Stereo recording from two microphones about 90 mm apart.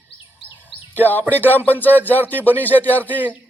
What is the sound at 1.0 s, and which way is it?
A man's voice, 20° left (ahead or behind).